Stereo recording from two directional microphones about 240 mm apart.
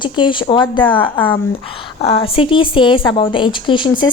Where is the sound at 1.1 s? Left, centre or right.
Centre.